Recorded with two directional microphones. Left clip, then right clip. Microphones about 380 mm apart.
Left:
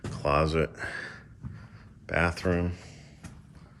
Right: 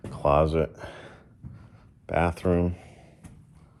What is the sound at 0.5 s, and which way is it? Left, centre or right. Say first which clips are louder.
Speech: right 1 dB; centre.